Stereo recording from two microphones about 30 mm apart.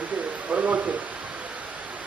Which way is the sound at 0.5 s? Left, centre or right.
Right.